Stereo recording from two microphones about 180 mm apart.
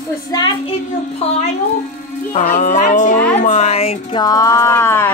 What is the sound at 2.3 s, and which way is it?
Speech, 40° left (ahead or behind).